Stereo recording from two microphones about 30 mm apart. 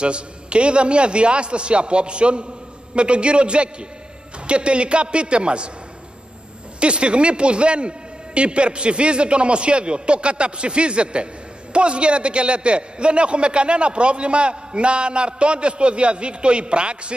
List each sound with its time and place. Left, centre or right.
0.0 s a man's voice: right
6.8 s a man's voice: right